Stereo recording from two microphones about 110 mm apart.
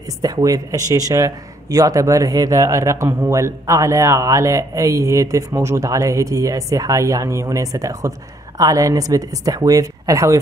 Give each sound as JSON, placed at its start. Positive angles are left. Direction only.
{"t": 0.2, "sound": "a woman's voice", "side_deg": -35}